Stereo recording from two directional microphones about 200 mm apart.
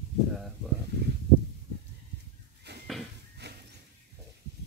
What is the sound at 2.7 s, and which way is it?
Dishes, 55° right (ahead or behind).